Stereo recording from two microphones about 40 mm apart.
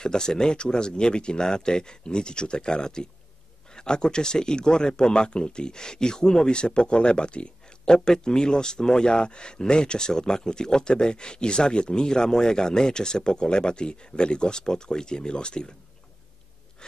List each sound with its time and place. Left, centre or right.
0.0 s speech: centre